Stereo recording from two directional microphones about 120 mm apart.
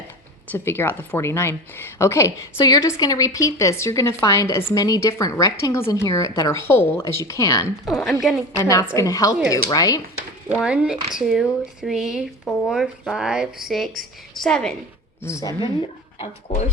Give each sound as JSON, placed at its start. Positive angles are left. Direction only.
{"t": 0.5, "sound": "a woman's voice", "side_deg": 20}
{"t": 7.9, "sound": "speech", "side_deg": 0}
{"t": 8.5, "sound": "a woman's voice", "side_deg": 25}
{"t": 10.5, "sound": "speech", "side_deg": -5}
{"t": 15.2, "sound": "a woman's voice", "side_deg": 25}